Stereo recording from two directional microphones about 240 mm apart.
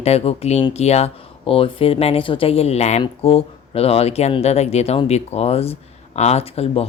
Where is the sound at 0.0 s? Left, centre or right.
Left.